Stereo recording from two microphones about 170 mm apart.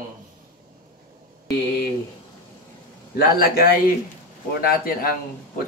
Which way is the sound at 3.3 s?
60° left (ahead or behind).